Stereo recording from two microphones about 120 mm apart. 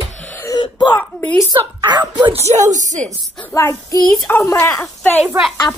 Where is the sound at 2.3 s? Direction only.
65° right (ahead or behind); by 3.1 s 90° right.